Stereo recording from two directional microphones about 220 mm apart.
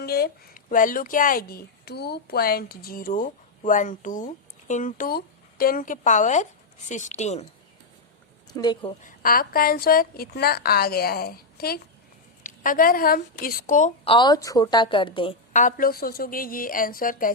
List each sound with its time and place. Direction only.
0.0 s speech: 45° left (ahead or behind)
8.4 s speech: 20° left (ahead or behind)
9.0 s a woman's voice: 40° left (ahead or behind)